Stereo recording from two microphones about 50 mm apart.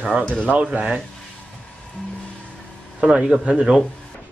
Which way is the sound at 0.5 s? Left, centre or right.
Right.